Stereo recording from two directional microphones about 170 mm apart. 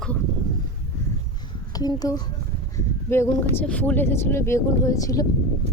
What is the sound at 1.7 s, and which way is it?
Speech, 20° left (ahead or behind).